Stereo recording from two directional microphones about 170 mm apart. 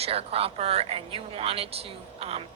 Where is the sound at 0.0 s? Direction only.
35° right (ahead or behind).